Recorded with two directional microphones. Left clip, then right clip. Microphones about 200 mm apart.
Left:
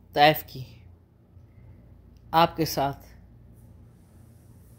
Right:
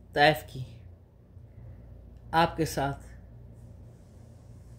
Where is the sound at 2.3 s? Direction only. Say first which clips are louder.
Left 4 dB; 15° left (ahead or behind).